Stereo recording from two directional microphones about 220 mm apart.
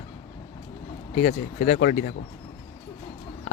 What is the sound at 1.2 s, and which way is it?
Speech, 35° left (ahead or behind).